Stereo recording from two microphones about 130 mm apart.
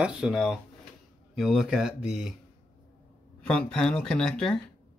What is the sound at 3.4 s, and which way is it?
Speech, 5° left (ahead or behind).